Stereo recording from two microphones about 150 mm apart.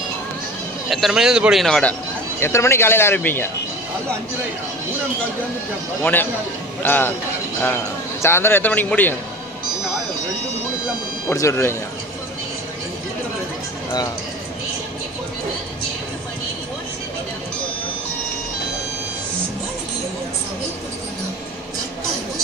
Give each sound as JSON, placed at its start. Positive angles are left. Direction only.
{"t": 0.8, "sound": "a man's voice", "side_deg": 0}
{"t": 2.4, "sound": "speech", "side_deg": 20}
{"t": 6.8, "sound": "speech", "side_deg": 15}
{"t": 8.2, "sound": "speech", "side_deg": 15}
{"t": 11.2, "sound": "speech", "side_deg": 20}